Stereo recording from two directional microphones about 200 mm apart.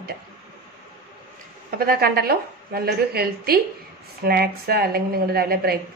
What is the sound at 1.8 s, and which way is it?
A woman's voice, 50° right (ahead or behind).